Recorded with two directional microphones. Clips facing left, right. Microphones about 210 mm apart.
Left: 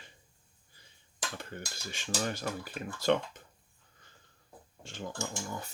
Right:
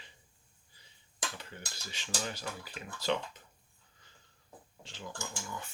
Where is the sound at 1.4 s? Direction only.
50° left (ahead or behind).